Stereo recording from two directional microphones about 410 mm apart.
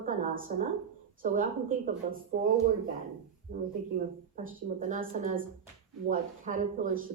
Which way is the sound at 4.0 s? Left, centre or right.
Centre.